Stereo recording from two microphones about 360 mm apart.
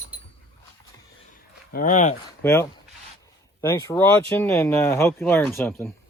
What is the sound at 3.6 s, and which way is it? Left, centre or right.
Speech, centre.